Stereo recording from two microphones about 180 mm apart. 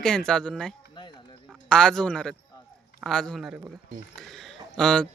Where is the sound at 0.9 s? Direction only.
25° left (ahead or behind).